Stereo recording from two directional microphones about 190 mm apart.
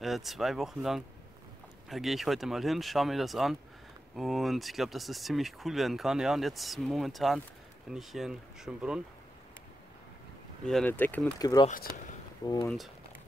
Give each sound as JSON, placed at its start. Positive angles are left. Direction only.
{"t": 0.0, "sound": "speech", "side_deg": 0}
{"t": 10.6, "sound": "speech", "side_deg": 5}
{"t": 11.3, "sound": "speech", "side_deg": 20}
{"t": 12.6, "sound": "speech", "side_deg": 0}